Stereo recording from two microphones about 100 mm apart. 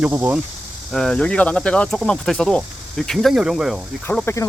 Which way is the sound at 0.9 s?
5° left (ahead or behind).